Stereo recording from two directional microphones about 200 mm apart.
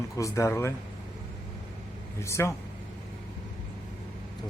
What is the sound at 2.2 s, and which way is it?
Speech, 15° left (ahead or behind).